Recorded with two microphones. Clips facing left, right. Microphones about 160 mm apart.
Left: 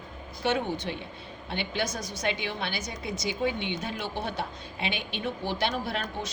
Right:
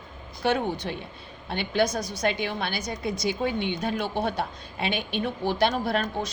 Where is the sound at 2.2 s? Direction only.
45° right (ahead or behind).